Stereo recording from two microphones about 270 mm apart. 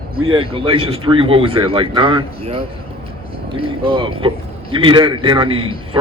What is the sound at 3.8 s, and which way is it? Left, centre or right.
Speech, centre.